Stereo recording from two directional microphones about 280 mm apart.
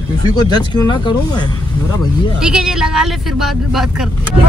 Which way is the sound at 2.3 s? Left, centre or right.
Centre.